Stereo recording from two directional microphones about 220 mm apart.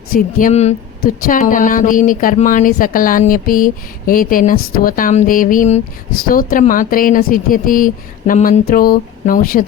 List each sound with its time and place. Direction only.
0.1 s speech: 40° left (ahead or behind)